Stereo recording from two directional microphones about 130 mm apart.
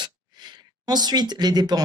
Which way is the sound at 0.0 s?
35° right (ahead or behind).